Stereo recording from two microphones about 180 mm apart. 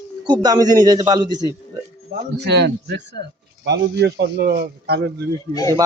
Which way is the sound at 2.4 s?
70° right (ahead or behind).